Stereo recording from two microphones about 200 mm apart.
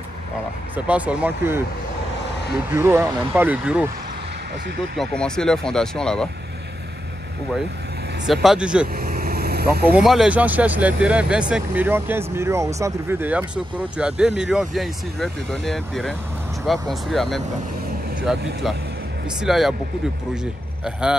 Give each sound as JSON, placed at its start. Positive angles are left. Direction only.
{"t": 0.7, "sound": "speech", "side_deg": -5}
{"t": 2.7, "sound": "speech", "side_deg": -15}
{"t": 4.9, "sound": "speech", "side_deg": 5}
{"t": 8.3, "sound": "speech", "side_deg": 0}
{"t": 8.9, "sound": "vehicle", "side_deg": -50}
{"t": 9.9, "sound": "speech", "side_deg": -5}